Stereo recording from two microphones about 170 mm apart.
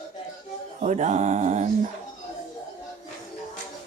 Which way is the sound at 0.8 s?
45° right (ahead or behind).